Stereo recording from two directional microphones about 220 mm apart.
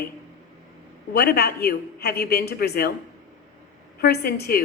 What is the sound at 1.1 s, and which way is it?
A woman's voice, 45° left (ahead or behind).